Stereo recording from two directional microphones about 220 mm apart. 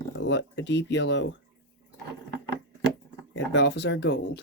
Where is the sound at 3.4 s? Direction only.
50° left (ahead or behind).